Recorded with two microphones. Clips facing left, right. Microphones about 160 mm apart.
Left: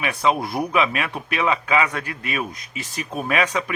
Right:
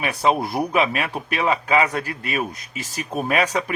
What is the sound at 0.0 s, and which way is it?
A man's voice, 35° right (ahead or behind).